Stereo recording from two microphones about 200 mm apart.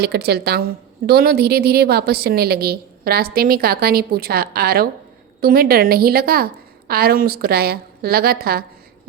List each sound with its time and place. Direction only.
0.0 s a woman's voice: 55° right (ahead or behind)